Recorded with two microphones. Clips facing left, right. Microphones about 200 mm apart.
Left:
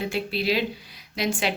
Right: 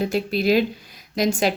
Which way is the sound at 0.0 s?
40° right (ahead or behind).